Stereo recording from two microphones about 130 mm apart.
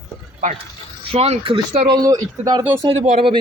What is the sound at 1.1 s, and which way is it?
Speech, 50° right (ahead or behind).